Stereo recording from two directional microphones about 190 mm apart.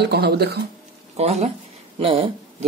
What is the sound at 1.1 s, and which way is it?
Speech, 35° right (ahead or behind).